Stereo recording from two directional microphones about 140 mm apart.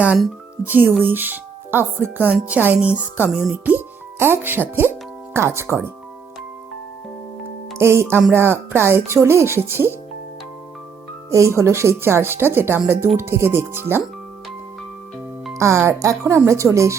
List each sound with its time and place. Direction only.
0.6 s speech: 15° right (ahead or behind)
7.8 s speech: 20° right (ahead or behind)
11.3 s speech: 20° right (ahead or behind)
15.5 s speech: 20° right (ahead or behind)